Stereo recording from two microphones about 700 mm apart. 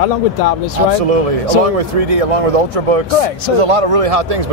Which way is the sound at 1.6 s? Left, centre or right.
Right.